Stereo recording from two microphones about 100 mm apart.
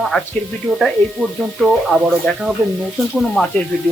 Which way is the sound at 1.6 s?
Centre (ahead or behind).